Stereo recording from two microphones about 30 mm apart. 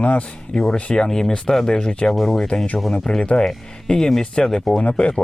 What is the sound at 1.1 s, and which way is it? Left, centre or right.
Speech, centre.